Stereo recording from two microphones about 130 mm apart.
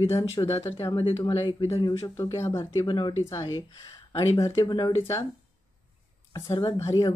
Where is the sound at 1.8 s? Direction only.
20° left (ahead or behind).